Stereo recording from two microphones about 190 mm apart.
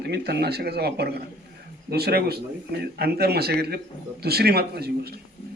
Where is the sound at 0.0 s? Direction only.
60° right (ahead or behind).